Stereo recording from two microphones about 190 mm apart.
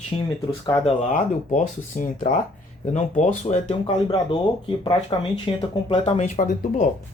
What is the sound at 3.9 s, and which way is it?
Speech, 20° left (ahead or behind).